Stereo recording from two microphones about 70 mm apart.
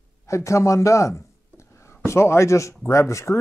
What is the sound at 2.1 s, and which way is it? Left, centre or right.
A man's voice, left.